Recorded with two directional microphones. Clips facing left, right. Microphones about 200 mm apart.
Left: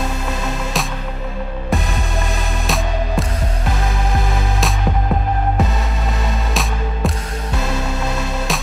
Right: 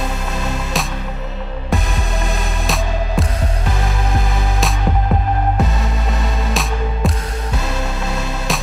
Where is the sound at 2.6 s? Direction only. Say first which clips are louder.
Left 1 dB; centre (ahead or behind).